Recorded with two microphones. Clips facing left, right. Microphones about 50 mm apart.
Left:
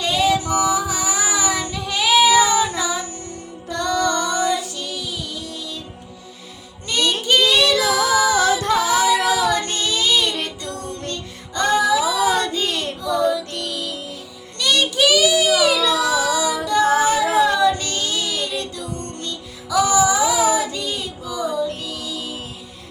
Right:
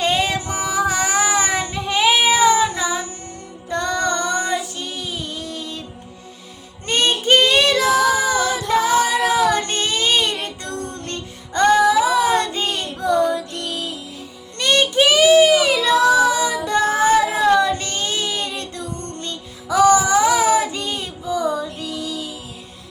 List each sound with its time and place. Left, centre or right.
0.0 s female singing: right
6.8 s music: right
8.8 s female singing: right
9.2 s child singing: right
13.0 s music: right
14.6 s child singing: right
19.2 s music: right